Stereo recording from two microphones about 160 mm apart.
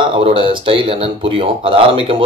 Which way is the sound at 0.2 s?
35° right (ahead or behind).